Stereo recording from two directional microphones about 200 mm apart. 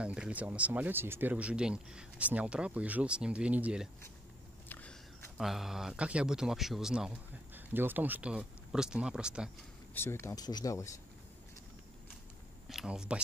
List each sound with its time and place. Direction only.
0.0 s speech: 5° right (ahead or behind)
4.6 s speech: 10° left (ahead or behind)
9.9 s speech: 10° left (ahead or behind)
12.6 s speech: centre (ahead or behind)